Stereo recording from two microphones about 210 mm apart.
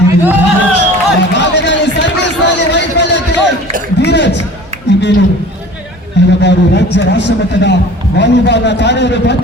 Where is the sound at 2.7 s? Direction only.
55° left (ahead or behind).